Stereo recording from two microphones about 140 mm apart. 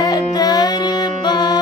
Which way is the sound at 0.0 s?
30° left (ahead or behind).